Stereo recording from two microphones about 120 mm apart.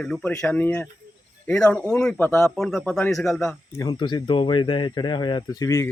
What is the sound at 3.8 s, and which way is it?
Speech, 40° left (ahead or behind).